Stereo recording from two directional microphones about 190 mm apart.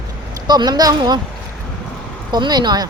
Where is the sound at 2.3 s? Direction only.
20° right (ahead or behind).